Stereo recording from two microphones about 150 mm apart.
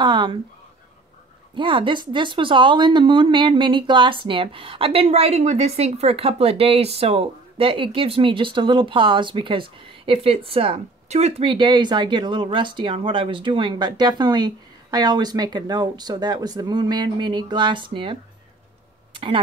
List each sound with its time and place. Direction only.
0.0 s a sound: 30° right (ahead or behind)
1.5 s speech: 35° right (ahead or behind)
19.1 s speech: 35° right (ahead or behind)